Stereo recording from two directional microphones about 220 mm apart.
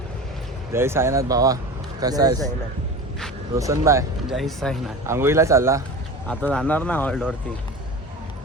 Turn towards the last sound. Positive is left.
turn(degrees=5)  # may be behind; listen again after turning